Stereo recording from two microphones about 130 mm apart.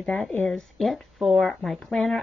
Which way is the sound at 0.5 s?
Centre (ahead or behind).